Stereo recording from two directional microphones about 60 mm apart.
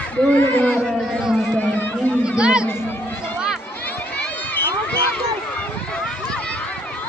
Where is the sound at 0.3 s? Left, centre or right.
Left.